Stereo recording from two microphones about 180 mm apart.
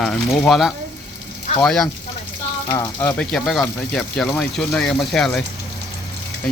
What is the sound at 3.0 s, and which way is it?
A man's voice, 10° left (ahead or behind).